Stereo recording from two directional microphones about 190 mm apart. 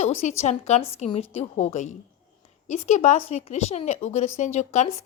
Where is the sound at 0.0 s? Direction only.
35° left (ahead or behind).